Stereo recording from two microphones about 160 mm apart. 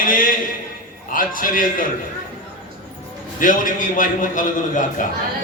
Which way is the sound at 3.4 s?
55° left (ahead or behind).